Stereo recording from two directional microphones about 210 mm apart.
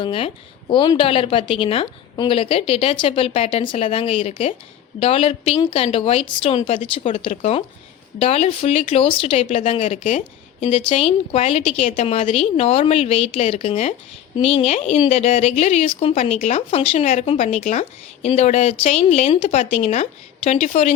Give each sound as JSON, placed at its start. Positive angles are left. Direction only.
{"t": 0.0, "sound": "a woman's voice", "side_deg": 25}